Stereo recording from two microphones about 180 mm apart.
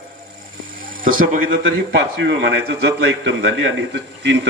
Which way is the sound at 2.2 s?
75° right (ahead or behind).